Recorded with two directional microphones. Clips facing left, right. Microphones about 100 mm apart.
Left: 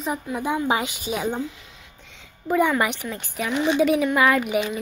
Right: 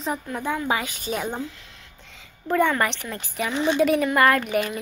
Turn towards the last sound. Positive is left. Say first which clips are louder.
# left 1 dB
turn(degrees=5)  # may be behind; listen again after turning